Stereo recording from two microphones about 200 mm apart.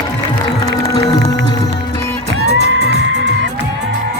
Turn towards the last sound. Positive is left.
turn(degrees=-55)  # may be behind; listen again after turning